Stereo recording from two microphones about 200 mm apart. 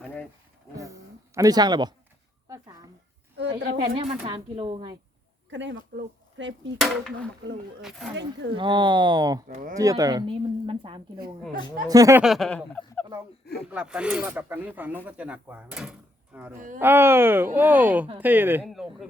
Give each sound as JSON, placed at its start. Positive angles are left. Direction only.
{"t": 0.8, "sound": "a sound", "side_deg": -15}
{"t": 3.7, "sound": "speech", "side_deg": -25}
{"t": 5.5, "sound": "speech", "side_deg": -65}
{"t": 6.7, "sound": "speech", "side_deg": 0}
{"t": 8.5, "sound": "speech", "side_deg": -25}
{"t": 9.5, "sound": "speech", "side_deg": -35}
{"t": 9.7, "sound": "speech", "side_deg": -15}
{"t": 12.2, "sound": "speech", "side_deg": 0}
{"t": 13.7, "sound": "speech", "side_deg": -5}
{"t": 16.6, "sound": "speech", "side_deg": -40}
{"t": 16.8, "sound": "speech", "side_deg": -10}